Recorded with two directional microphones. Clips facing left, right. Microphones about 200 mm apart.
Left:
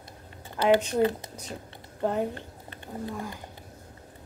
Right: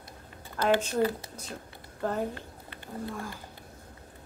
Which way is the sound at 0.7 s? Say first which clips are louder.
Left 3 dB; 20° left (ahead or behind).